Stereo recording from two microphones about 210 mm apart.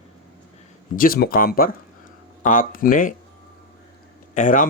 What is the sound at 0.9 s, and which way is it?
Speech, 45° left (ahead or behind).